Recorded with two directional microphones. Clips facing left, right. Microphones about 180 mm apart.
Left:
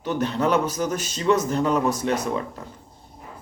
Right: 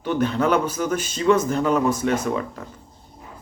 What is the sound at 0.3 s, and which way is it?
Speech, 35° left (ahead or behind).